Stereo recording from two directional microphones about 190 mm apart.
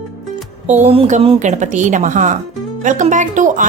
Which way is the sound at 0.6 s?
35° right (ahead or behind).